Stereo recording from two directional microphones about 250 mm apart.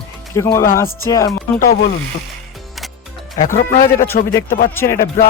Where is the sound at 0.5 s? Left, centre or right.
Centre.